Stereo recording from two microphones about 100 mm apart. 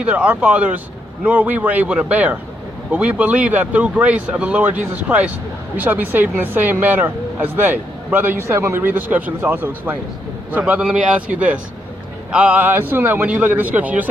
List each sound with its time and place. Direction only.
0.0 s speech: 10° right (ahead or behind)